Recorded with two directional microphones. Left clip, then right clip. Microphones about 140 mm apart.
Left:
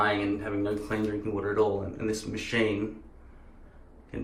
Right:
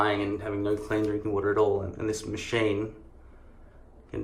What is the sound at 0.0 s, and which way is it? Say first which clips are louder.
Speech: even; 15° right (ahead or behind).